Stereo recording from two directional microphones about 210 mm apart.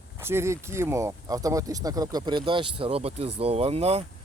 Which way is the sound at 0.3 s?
10° right (ahead or behind).